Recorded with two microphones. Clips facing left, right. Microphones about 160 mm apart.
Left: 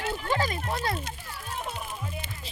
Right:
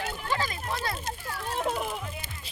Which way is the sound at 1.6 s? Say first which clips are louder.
Right 7 dB; 90° right.